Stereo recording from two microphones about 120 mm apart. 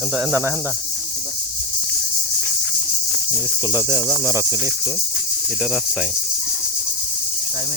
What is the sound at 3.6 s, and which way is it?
Cricket, 20° right (ahead or behind).